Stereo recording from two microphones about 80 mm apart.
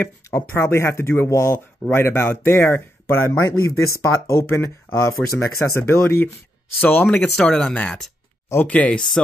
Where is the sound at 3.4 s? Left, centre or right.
Left.